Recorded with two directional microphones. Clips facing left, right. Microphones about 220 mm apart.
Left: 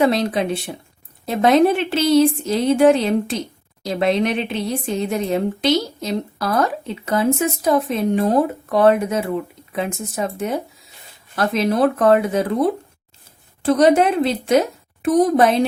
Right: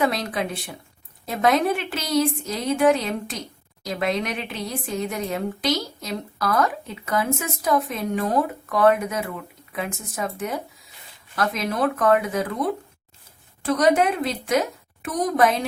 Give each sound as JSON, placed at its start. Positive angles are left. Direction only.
{"t": 0.0, "sound": "speech", "side_deg": 25}